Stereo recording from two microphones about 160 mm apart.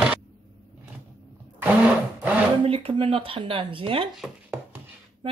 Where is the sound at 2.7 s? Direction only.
35° right (ahead or behind).